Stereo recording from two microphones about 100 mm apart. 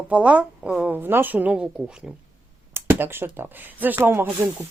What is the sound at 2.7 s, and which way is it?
Speech, 25° right (ahead or behind).